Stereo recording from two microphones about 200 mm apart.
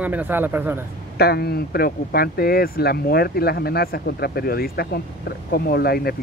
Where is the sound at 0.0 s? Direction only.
10° right (ahead or behind).